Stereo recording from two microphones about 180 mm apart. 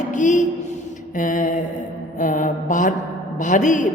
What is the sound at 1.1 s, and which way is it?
A woman's voice, 45° left (ahead or behind).